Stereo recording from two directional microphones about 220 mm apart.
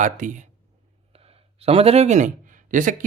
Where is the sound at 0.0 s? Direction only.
35° right (ahead or behind).